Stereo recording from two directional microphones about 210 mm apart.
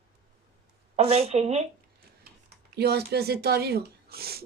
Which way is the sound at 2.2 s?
50° right (ahead or behind).